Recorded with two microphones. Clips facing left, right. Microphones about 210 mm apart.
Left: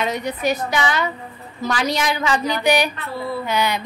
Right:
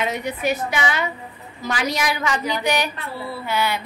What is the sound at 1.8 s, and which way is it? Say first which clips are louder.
Speech: left 1 dB; 30° left (ahead or behind).